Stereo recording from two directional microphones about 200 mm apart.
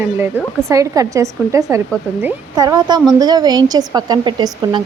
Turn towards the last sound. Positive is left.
turn(degrees=-20)  # may be behind; listen again after turning